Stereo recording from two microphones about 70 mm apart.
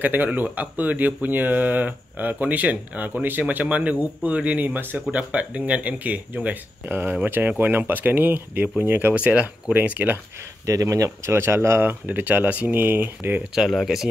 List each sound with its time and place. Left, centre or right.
0.0 s speech: right
9.1 s speech: centre
9.8 s speech: right
10.6 s speech: right
13.6 s speech: centre